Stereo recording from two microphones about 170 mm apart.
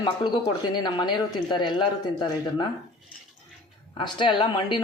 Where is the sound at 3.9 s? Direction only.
30° left (ahead or behind).